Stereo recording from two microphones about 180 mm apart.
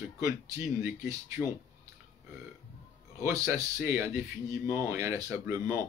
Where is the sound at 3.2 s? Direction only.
15° right (ahead or behind).